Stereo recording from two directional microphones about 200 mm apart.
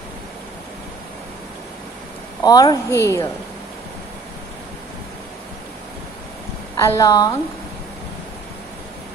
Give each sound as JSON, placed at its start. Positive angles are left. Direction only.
{"t": 2.4, "sound": "a woman's voice", "side_deg": 20}
{"t": 6.8, "sound": "a woman's voice", "side_deg": 15}